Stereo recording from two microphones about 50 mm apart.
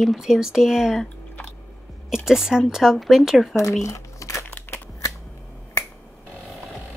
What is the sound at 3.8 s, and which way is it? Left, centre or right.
Crumpling, left.